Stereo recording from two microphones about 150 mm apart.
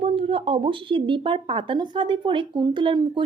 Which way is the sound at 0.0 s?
40° right (ahead or behind).